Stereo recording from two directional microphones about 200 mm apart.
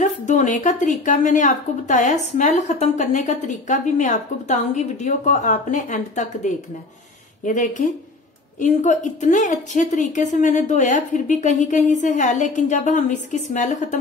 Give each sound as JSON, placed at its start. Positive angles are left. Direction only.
{"t": 0.0, "sound": "a woman's voice", "side_deg": 40}